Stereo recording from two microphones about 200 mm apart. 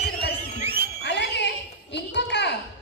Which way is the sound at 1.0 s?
60° left (ahead or behind).